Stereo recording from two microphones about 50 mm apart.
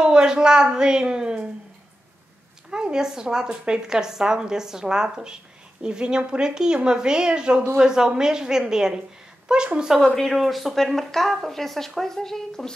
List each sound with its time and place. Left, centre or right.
0.0 s a woman's voice: centre
2.7 s a woman's voice: centre
9.9 s a woman's voice: centre